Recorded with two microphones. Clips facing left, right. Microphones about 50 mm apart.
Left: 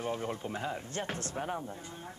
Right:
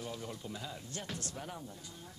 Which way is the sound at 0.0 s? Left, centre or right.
Left.